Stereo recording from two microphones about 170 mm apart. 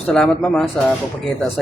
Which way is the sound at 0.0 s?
5° left (ahead or behind).